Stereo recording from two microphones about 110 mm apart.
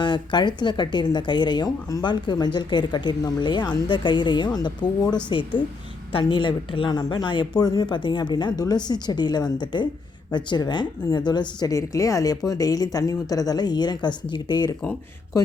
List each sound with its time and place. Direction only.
0.0 s a woman's voice: 45° left (ahead or behind)